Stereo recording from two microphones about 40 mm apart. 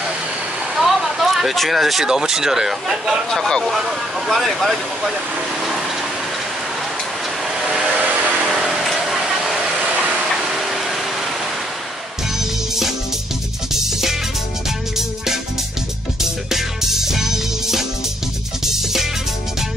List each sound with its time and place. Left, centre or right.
0.7 s vehicle: centre
2.0 s speech: centre
7.5 s vehicle: centre
9.8 s a sound: right
10.4 s a sound: centre
16.2 s music: centre